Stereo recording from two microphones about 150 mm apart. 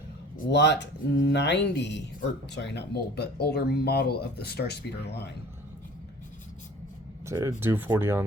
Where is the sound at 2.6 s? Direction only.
90° left.